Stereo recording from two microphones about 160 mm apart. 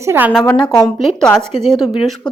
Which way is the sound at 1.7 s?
25° left (ahead or behind).